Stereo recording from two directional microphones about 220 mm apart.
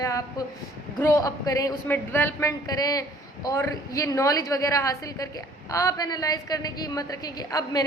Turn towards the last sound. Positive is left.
turn(degrees=15)  # may be behind; listen again after turning